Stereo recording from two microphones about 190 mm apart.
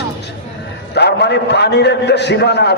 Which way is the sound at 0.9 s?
65° left (ahead or behind).